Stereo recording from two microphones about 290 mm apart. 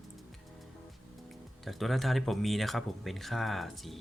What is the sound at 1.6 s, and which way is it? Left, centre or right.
Speech, centre.